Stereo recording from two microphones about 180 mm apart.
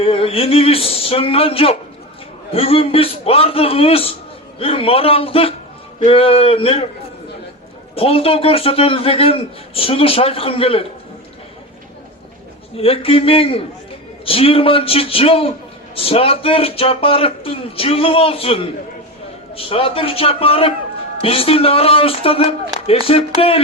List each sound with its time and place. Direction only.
0.0 s a man's voice: 30° left (ahead or behind)
7.9 s a man's voice: 30° left (ahead or behind)
12.7 s a man's voice: 30° left (ahead or behind)